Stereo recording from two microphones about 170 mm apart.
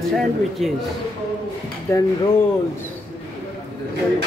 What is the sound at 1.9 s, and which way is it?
Speech, 15° left (ahead or behind).